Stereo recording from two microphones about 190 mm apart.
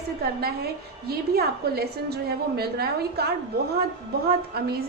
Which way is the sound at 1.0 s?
55° right (ahead or behind).